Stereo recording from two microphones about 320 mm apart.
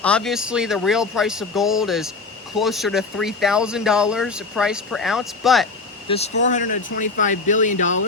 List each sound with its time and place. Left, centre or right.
0.0 s speech: centre
6.1 s speech: left